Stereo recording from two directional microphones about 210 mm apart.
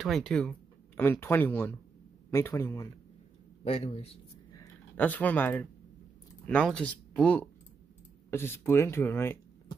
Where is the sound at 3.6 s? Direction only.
30° left (ahead or behind).